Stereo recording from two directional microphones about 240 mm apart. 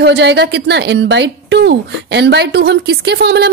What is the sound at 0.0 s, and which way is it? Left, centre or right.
A woman's voice, right.